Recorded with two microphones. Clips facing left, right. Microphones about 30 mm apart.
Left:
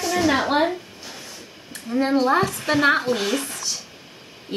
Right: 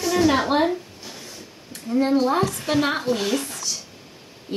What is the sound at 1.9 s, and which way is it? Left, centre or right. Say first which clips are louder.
Speech: left 1 dB; centre.